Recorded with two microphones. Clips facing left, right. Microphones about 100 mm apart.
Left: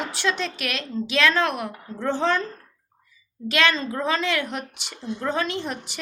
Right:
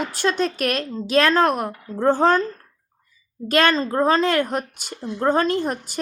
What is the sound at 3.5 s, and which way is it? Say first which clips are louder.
Speech: right 4 dB; 45° right (ahead or behind).